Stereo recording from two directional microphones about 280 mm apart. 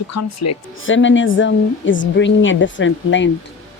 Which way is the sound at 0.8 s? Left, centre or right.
Left.